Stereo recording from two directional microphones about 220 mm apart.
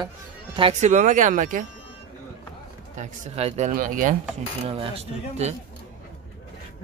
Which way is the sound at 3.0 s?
30° right (ahead or behind).